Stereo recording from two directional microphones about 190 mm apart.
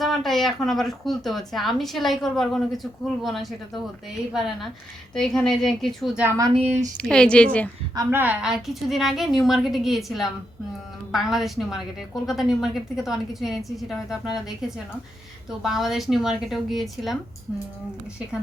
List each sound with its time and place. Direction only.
0.0 s a woman's voice: centre (ahead or behind)
6.5 s speech: 35° right (ahead or behind)
7.1 s a woman's voice: 5° left (ahead or behind)
7.9 s a woman's voice: 10° right (ahead or behind)